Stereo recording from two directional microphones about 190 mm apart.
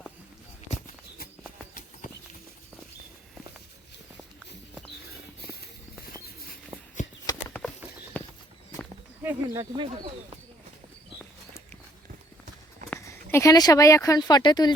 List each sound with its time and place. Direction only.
7.3 s horse: 20° left (ahead or behind)
8.1 s clip-clop: 10° left (ahead or behind)
9.2 s speech: 15° right (ahead or behind)
12.9 s speech: 15° left (ahead or behind)